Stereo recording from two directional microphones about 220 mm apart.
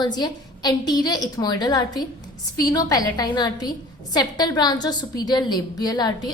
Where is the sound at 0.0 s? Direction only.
20° left (ahead or behind).